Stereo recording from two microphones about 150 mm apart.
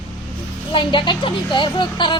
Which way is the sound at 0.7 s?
35° left (ahead or behind).